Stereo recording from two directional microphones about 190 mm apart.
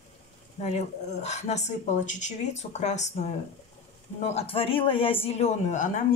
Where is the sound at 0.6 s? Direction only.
35° left (ahead or behind).